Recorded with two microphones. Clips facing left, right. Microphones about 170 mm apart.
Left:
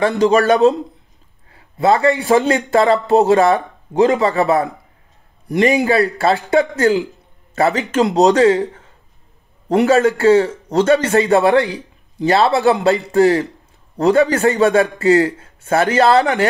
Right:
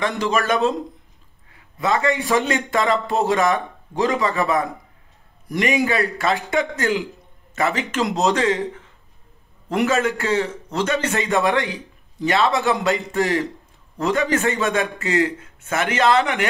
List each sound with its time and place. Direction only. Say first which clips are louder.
0.0 s a man's voice: left 8 dB; 35° left (ahead or behind)